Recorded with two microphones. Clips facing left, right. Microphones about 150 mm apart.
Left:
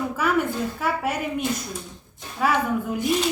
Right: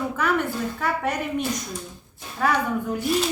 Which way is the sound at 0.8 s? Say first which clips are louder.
Right 1 dB; 5° left (ahead or behind).